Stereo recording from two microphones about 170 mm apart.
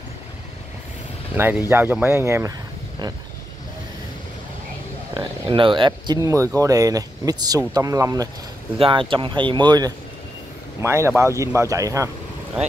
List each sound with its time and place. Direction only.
1.3 s speech: 10° right (ahead or behind)
5.1 s speech: 30° right (ahead or behind)
8.7 s speech: 30° right (ahead or behind)